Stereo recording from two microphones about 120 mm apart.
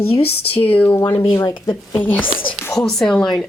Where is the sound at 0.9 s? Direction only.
15° left (ahead or behind).